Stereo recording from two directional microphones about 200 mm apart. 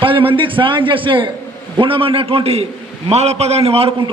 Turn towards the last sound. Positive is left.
turn(degrees=-30)  # may be behind; listen again after turning